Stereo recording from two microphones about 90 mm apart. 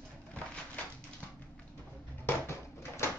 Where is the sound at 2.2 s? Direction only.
30° left (ahead or behind).